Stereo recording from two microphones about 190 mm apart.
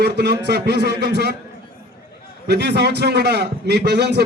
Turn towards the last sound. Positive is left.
turn(degrees=-60)  # may be behind; listen again after turning